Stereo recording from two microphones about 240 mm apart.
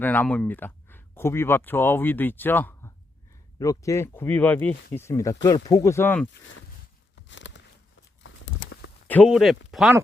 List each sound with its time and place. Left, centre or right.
0.0 s speech: centre
7.2 s a sound: left
9.0 s speech: centre